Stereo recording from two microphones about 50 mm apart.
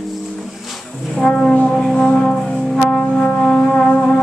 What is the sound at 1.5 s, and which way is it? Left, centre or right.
Music, left.